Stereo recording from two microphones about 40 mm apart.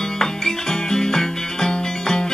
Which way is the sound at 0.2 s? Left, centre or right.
Centre.